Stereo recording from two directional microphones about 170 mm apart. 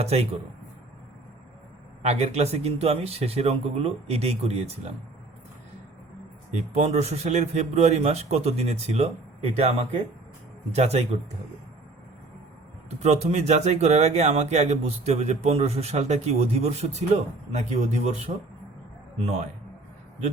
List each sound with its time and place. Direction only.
0.0 s speech: 35° right (ahead or behind)
2.0 s speech: 40° right (ahead or behind)
6.5 s speech: 40° right (ahead or behind)
13.0 s speech: 40° right (ahead or behind)